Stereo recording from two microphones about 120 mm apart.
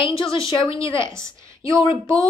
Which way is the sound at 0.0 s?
40° left (ahead or behind).